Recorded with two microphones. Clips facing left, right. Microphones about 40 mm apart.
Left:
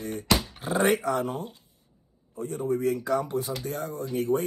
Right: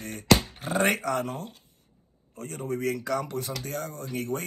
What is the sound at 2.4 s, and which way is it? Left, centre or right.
Speech, right.